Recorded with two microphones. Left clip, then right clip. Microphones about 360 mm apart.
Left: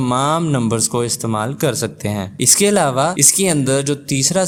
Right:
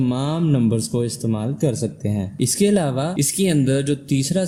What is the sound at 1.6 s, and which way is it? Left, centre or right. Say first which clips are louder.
Speech: left 4 dB; left.